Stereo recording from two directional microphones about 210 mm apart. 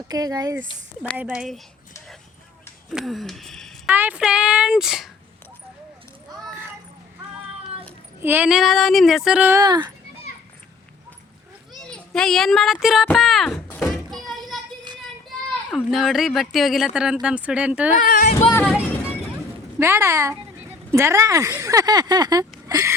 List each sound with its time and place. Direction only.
0.1 s speech: 15° right (ahead or behind)
1.1 s speech: 5° right (ahead or behind)
2.9 s speech: centre (ahead or behind)
8.2 s speech: 10° right (ahead or behind)
11.9 s a sound: 5° left (ahead or behind)
15.7 s speech: centre (ahead or behind)
17.9 s speech: 40° left (ahead or behind)
18.3 s speech: 10° left (ahead or behind)
19.8 s speech: 15° right (ahead or behind)